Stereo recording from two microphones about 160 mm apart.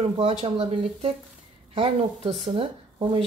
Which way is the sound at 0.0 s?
40° right (ahead or behind).